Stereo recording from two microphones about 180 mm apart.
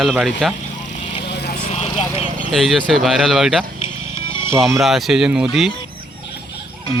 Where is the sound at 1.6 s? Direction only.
35° left (ahead or behind).